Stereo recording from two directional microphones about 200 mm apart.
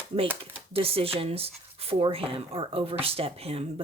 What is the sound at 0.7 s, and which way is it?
Speech, 30° right (ahead or behind).